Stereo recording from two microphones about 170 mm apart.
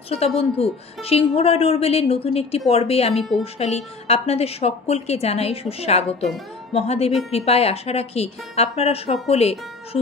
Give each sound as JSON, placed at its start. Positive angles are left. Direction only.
{"t": 0.4, "sound": "a woman's voice", "side_deg": 35}